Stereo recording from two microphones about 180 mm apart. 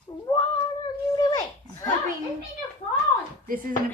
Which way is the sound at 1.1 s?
20° left (ahead or behind).